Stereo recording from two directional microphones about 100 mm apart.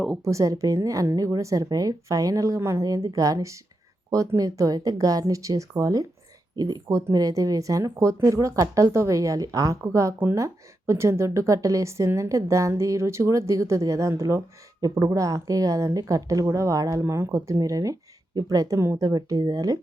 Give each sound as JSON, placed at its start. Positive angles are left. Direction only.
{"t": 0.3, "sound": "a woman's voice", "side_deg": -35}